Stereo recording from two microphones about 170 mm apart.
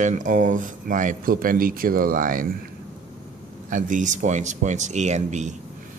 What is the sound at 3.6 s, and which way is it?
Speech, 50° right (ahead or behind).